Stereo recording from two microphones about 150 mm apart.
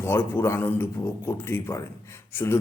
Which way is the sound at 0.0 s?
15° left (ahead or behind).